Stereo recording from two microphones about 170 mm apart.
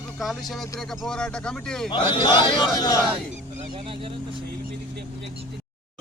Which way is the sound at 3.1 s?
30° right (ahead or behind).